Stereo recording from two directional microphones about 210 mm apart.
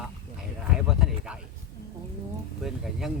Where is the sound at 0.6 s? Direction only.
Centre (ahead or behind).